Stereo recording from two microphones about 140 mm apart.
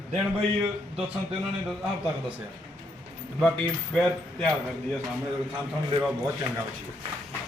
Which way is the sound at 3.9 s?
5° left (ahead or behind).